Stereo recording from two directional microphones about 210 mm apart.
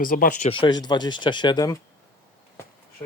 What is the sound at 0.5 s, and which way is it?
Speech, 20° left (ahead or behind).